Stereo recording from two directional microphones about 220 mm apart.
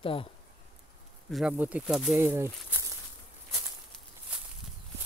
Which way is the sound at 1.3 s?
5° right (ahead or behind).